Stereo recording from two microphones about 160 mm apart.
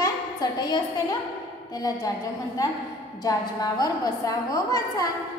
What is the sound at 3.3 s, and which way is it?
A woman's voice, 20° left (ahead or behind).